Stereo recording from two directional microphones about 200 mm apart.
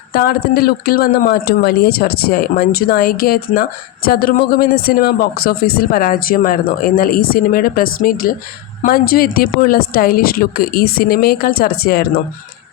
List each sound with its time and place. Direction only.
0.1 s speech: 45° left (ahead or behind)